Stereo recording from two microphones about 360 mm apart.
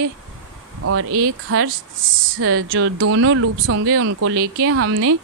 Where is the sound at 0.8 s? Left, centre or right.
Right.